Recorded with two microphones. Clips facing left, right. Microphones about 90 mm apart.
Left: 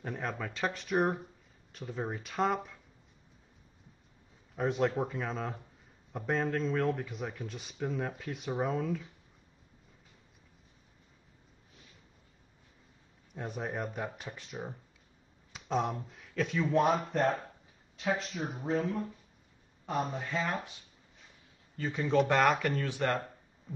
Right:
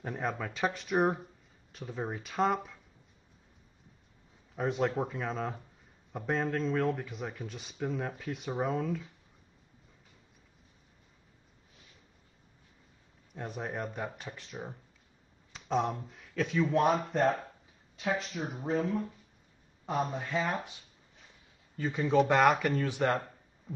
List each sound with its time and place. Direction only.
0.0 s speech: 5° right (ahead or behind)
4.6 s speech: centre (ahead or behind)
13.3 s speech: centre (ahead or behind)
14.2 s speech: 15° left (ahead or behind)
15.5 s speech: centre (ahead or behind)
18.7 s speech: centre (ahead or behind)
20.2 s speech: 15° right (ahead or behind)
21.7 s speech: 10° right (ahead or behind)